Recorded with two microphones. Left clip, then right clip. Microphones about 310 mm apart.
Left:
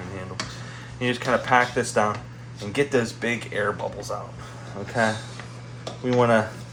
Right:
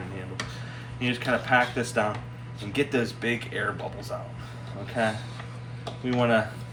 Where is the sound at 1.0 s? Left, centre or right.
Left.